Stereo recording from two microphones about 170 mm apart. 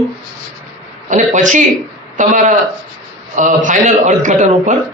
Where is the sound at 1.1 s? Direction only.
45° right (ahead or behind).